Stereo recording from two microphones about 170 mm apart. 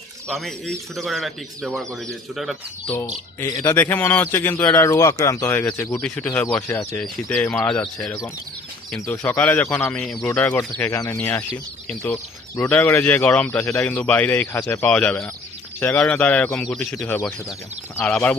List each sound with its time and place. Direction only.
0.3 s speech: centre (ahead or behind)
3.4 s speech: 20° left (ahead or behind)